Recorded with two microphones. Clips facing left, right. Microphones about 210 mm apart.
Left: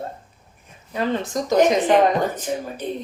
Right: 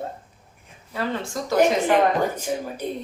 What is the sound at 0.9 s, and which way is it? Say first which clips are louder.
A woman's voice: left 4 dB; 20° left (ahead or behind).